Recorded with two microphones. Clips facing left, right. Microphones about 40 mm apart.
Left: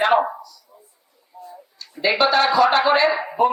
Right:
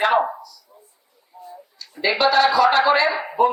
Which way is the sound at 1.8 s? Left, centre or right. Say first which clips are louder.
Left 1 dB; left.